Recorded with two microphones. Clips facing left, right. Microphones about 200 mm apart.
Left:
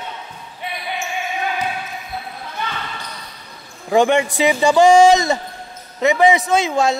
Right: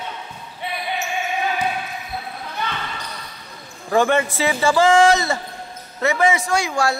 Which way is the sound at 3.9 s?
15° left (ahead or behind).